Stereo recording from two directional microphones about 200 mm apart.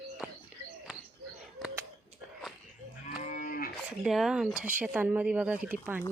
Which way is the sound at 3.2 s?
40° left (ahead or behind).